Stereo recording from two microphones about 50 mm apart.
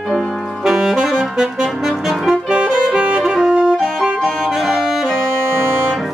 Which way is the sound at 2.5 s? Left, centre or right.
Right.